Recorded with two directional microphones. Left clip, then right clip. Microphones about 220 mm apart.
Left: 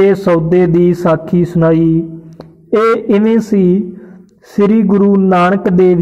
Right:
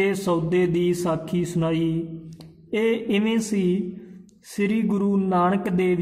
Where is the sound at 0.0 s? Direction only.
15° left (ahead or behind).